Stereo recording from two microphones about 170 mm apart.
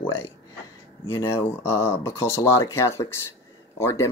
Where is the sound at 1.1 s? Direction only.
15° left (ahead or behind).